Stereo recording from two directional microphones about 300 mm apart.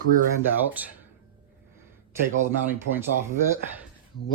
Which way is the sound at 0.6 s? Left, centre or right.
Centre.